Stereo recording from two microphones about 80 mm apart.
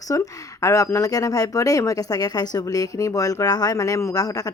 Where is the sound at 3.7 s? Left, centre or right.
Left.